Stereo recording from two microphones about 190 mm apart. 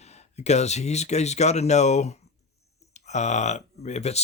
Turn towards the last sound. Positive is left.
turn(degrees=35)  # may be behind; listen again after turning